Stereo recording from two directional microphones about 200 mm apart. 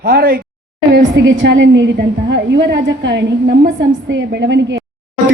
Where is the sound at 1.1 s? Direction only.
65° right (ahead or behind).